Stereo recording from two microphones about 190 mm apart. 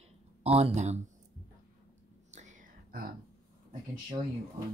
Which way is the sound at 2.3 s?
40° right (ahead or behind).